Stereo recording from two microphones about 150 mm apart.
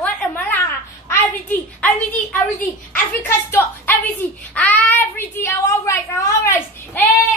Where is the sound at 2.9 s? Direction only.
15° left (ahead or behind).